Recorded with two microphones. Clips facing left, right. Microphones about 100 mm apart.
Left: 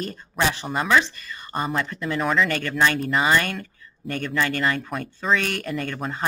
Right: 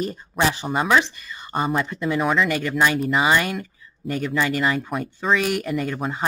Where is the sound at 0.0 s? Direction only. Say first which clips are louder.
Right 2 dB; 10° right (ahead or behind).